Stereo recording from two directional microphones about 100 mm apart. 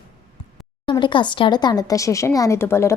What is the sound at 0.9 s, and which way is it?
A woman's voice, 50° left (ahead or behind).